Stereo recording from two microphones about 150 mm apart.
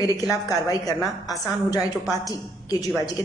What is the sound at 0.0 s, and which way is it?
A woman's voice, 25° left (ahead or behind).